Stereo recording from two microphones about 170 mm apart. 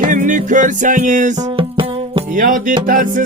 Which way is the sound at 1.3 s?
25° right (ahead or behind).